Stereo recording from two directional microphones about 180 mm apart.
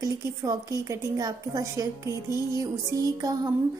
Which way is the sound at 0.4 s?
20° right (ahead or behind).